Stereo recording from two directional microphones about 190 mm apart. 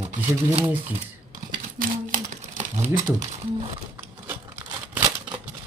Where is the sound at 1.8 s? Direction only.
45° right (ahead or behind).